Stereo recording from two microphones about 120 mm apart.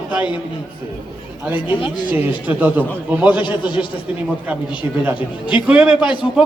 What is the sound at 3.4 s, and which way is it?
Speech, 40° left (ahead or behind).